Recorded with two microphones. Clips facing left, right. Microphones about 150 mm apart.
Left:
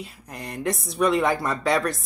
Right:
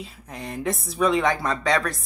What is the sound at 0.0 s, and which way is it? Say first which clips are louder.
Speech: right 1 dB; centre (ahead or behind).